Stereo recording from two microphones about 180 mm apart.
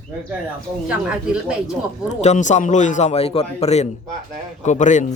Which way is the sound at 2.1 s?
40° left (ahead or behind).